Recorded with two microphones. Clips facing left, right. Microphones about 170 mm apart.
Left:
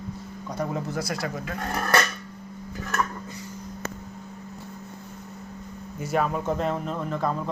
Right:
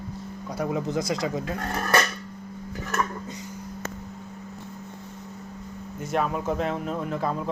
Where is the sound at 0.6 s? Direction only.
15° right (ahead or behind).